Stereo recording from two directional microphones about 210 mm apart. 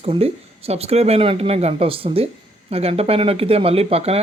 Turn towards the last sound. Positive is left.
turn(degrees=-30)  # may be behind; listen again after turning